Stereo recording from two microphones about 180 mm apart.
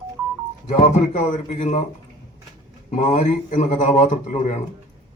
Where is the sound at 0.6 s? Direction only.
40° left (ahead or behind).